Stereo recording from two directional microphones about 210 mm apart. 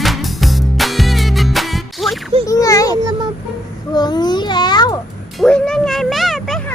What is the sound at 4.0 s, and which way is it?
Babbling, 20° left (ahead or behind).